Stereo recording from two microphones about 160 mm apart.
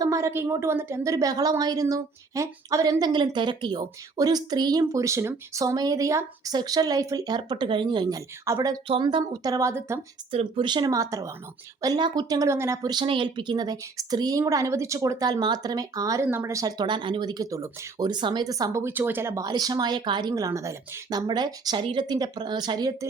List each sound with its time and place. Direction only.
0.0 s speech: 20° right (ahead or behind)
10.3 s speech: 35° right (ahead or behind)